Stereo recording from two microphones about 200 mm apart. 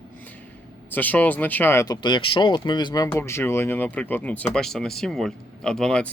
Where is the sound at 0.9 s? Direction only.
10° left (ahead or behind).